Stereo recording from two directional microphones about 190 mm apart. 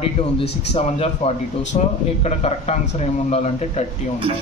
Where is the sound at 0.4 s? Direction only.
30° left (ahead or behind).